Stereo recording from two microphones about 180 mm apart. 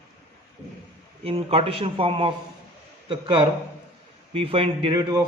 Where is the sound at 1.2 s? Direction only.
30° right (ahead or behind).